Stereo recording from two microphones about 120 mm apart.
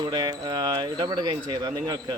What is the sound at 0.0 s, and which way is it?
Speech, 35° right (ahead or behind).